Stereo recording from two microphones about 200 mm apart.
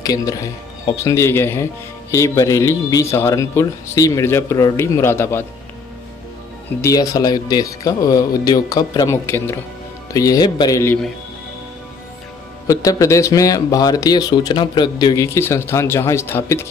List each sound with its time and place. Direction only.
0.0 s speech: 15° left (ahead or behind)
6.8 s speech: 15° left (ahead or behind)
12.6 s speech: 15° left (ahead or behind)